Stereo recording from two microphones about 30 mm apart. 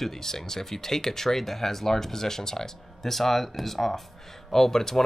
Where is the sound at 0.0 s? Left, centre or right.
Centre.